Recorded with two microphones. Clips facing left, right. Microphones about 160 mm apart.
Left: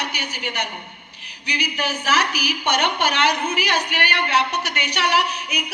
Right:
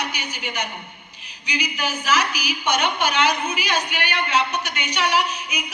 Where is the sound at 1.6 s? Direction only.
70° left (ahead or behind).